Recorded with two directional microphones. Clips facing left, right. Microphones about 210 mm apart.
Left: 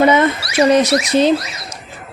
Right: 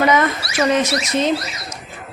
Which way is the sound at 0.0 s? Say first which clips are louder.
Left 4 dB; 25° left (ahead or behind).